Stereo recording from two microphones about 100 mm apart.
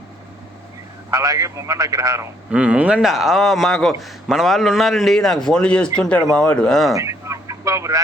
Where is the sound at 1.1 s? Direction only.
35° right (ahead or behind).